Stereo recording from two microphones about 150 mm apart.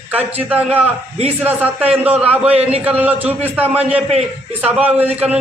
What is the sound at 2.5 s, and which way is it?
Speech, 45° right (ahead or behind).